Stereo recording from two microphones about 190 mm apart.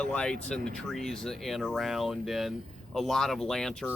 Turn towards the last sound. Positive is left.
turn(degrees=0)  # may be behind; listen again after turning